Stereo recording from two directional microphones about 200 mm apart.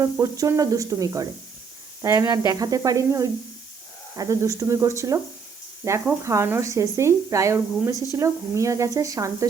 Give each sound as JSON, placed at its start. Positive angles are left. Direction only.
{"t": 0.0, "sound": "speech", "side_deg": -15}